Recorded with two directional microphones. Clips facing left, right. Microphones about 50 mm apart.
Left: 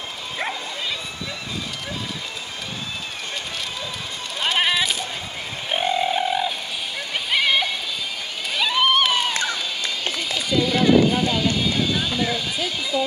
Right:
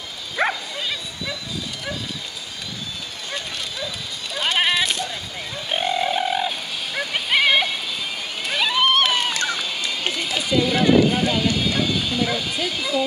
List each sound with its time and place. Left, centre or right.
0.4 s bow-wow: right
4.4 s sheep: centre
5.7 s bird: centre
7.2 s a sound: centre
10.2 s run: centre
10.9 s a sound: centre
11.5 s speech: centre